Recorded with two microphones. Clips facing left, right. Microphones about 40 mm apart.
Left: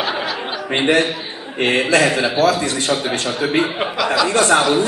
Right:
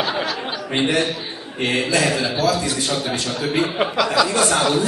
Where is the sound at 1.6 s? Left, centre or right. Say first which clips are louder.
Left 4 dB; left.